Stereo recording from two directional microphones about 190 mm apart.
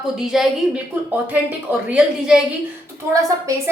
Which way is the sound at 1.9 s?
5° right (ahead or behind).